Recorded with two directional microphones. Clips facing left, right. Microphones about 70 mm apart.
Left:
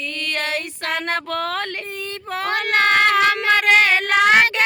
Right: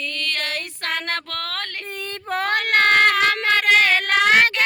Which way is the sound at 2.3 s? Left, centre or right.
Right.